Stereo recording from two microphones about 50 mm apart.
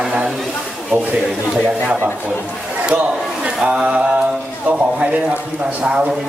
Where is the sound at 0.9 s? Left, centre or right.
Right.